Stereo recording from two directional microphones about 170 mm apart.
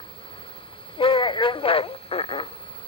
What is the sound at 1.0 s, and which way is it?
Speech, 30° left (ahead or behind).